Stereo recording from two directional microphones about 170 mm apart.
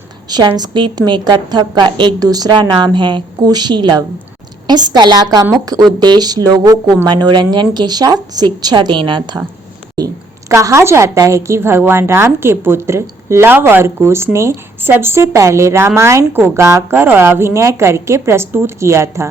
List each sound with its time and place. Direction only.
0.3 s speech: 25° right (ahead or behind)
10.5 s a woman's voice: 15° right (ahead or behind)